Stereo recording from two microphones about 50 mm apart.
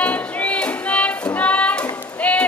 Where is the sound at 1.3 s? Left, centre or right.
Left.